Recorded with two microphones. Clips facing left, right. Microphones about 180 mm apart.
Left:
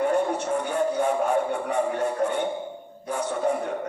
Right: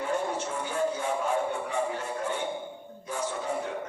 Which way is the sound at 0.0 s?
60° left (ahead or behind).